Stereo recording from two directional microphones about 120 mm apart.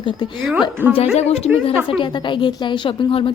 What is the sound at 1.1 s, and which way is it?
Speech, 60° left (ahead or behind).